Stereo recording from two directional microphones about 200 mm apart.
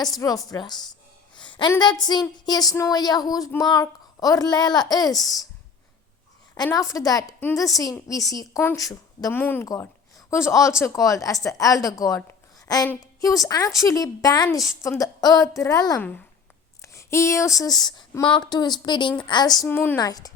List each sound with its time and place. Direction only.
0.2 s speech: 15° left (ahead or behind)
1.4 s a sound: 25° left (ahead or behind)
1.8 s speech: 20° left (ahead or behind)
6.5 s a woman's voice: 15° left (ahead or behind)
16.8 s a sound: 15° left (ahead or behind)
17.6 s speech: 20° left (ahead or behind)